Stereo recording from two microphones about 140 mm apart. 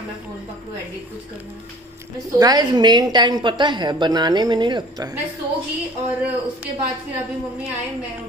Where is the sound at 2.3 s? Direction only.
25° right (ahead or behind).